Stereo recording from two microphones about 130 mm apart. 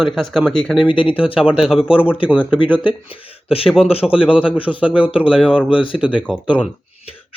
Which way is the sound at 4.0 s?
10° right (ahead or behind).